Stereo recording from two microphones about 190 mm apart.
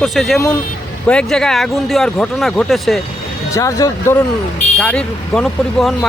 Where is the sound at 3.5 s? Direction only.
15° left (ahead or behind).